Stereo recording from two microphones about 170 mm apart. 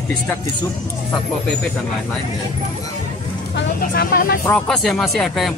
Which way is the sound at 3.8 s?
55° left (ahead or behind).